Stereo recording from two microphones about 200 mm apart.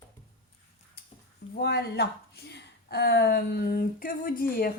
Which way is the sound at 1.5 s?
55° left (ahead or behind).